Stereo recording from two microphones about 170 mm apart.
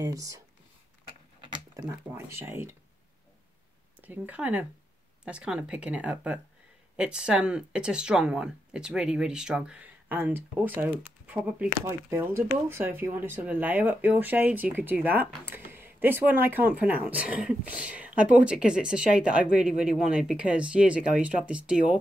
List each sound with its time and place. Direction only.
0.0 s speech: 20° right (ahead or behind)
1.9 s speech: 15° right (ahead or behind)
4.0 s speech: 10° right (ahead or behind)